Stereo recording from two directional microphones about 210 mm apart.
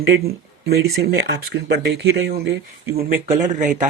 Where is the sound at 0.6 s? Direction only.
50° right (ahead or behind).